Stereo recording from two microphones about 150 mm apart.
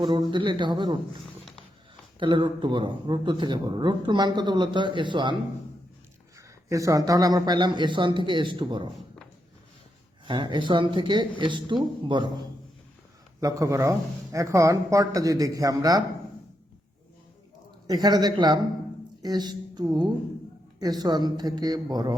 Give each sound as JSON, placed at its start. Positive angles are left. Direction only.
{"t": 0.0, "sound": "a man's voice", "side_deg": -30}
{"t": 2.1, "sound": "a man's voice", "side_deg": -35}
{"t": 6.7, "sound": "a man's voice", "side_deg": -20}
{"t": 10.2, "sound": "a man's voice", "side_deg": -30}
{"t": 13.4, "sound": "speech", "side_deg": -20}
{"t": 17.8, "sound": "a woman's voice", "side_deg": -25}